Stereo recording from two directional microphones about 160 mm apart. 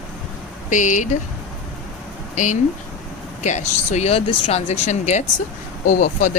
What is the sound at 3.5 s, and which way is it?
Speech, 45° left (ahead or behind).